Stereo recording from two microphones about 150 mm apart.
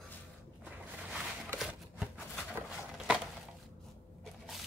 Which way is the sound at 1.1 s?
5° right (ahead or behind).